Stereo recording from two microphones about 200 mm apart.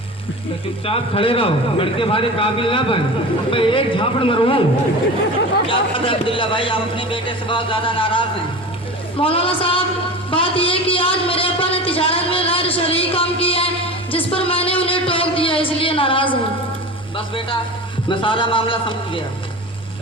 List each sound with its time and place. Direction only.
0.9 s speech: 30° left (ahead or behind)
5.6 s speech: 25° left (ahead or behind)
10.2 s a sound: 25° left (ahead or behind)
17.2 s speech: 25° left (ahead or behind)